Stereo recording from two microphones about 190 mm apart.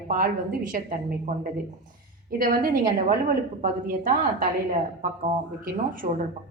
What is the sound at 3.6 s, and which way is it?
Speech, 45° right (ahead or behind).